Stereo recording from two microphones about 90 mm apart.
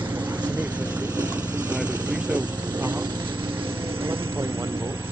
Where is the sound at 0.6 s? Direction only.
20° right (ahead or behind).